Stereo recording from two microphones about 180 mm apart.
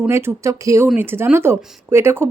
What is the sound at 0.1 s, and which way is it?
Speech, 15° right (ahead or behind).